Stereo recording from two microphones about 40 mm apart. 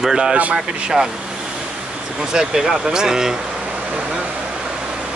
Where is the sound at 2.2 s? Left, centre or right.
Centre.